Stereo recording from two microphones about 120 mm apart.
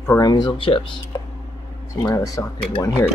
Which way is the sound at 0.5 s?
45° left (ahead or behind).